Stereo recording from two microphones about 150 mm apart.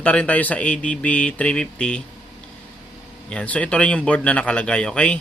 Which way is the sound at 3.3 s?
5° left (ahead or behind).